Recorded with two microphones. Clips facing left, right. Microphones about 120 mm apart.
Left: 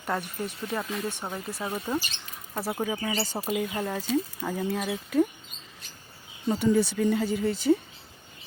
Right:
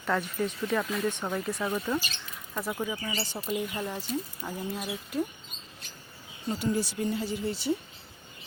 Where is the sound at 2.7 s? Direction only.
60° left (ahead or behind).